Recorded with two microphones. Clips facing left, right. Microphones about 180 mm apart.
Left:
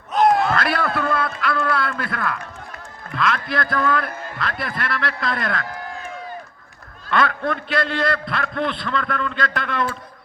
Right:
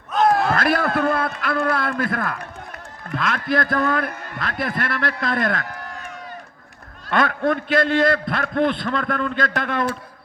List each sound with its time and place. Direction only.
0.4 s a man's voice: 45° right (ahead or behind)
7.1 s a man's voice: 50° right (ahead or behind)